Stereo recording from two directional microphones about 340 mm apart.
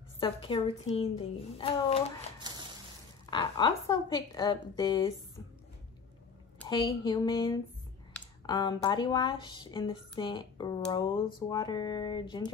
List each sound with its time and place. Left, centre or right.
0.2 s speech: centre
2.3 s stir: centre
3.3 s speech: centre
6.6 s speech: centre